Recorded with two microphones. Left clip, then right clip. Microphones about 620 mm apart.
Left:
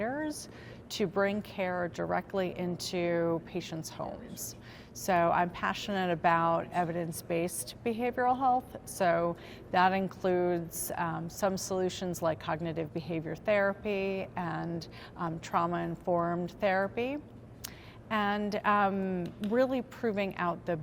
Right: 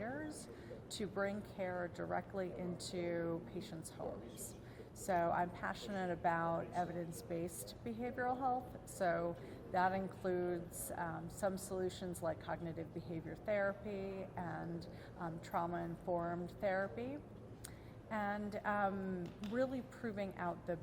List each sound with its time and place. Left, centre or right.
0.0 s a sound: left
0.9 s a woman's voice: left
5.0 s a woman's voice: left